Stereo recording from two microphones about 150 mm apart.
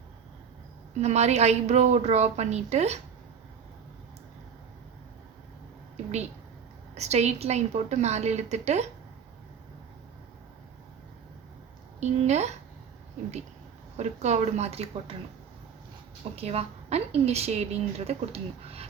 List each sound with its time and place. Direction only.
0.9 s a woman's voice: 50° right (ahead or behind)
6.9 s a woman's voice: 45° right (ahead or behind)
11.9 s a woman's voice: 50° right (ahead or behind)
13.9 s a woman's voice: 50° right (ahead or behind)
16.3 s a woman's voice: 45° right (ahead or behind)